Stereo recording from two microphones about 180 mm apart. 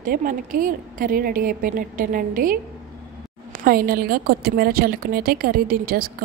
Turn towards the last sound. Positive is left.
turn(degrees=-55)  # may be behind; listen again after turning